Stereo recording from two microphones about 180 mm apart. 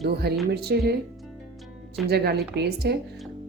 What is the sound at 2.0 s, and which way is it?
Speech, 60° right (ahead or behind).